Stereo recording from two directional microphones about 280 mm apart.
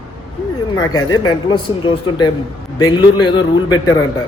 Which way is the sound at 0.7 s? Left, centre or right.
Centre.